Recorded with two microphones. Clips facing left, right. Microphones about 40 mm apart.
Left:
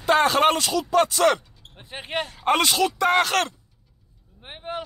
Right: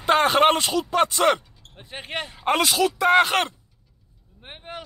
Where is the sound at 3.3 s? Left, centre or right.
Centre.